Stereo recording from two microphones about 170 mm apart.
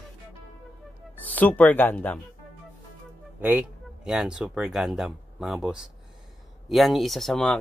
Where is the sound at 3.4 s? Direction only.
5° right (ahead or behind).